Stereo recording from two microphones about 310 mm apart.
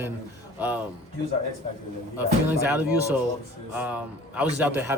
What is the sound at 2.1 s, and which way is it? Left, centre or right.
A man's voice, centre.